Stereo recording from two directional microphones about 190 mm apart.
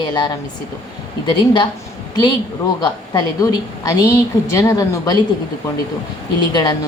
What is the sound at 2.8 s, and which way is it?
A woman's voice, 20° left (ahead or behind).